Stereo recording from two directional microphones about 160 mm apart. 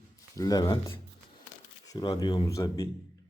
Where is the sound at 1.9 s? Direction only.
30° left (ahead or behind).